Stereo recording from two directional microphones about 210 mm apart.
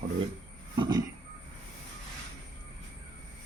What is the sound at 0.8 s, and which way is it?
Speech, 20° right (ahead or behind).